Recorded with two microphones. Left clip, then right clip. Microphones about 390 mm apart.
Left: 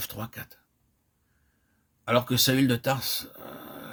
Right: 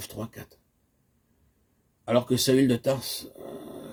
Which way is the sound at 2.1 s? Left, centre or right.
Left.